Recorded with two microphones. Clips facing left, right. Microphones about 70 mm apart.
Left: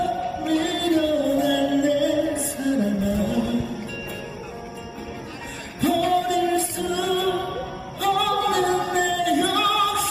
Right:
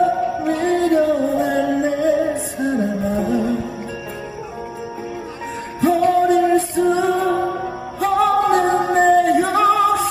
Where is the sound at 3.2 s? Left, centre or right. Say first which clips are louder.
Right 4 dB; right.